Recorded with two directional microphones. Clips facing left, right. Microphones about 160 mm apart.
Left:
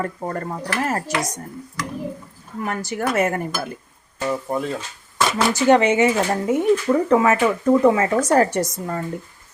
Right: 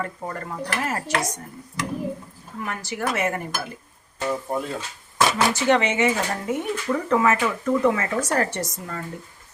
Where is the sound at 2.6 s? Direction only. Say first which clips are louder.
Left 4 dB; 45° left (ahead or behind).